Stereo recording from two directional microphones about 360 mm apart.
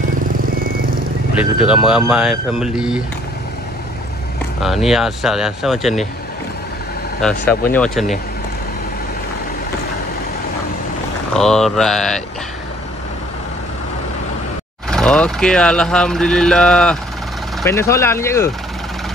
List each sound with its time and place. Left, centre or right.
1.6 s speech: centre
4.6 s speech: centre
7.2 s speech: centre
11.3 s speech: centre
14.9 s speech: centre